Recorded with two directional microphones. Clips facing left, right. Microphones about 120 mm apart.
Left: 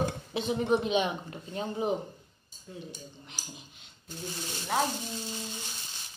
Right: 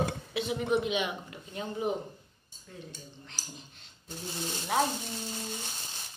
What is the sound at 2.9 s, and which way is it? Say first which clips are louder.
Speech: left 2 dB; 15° left (ahead or behind).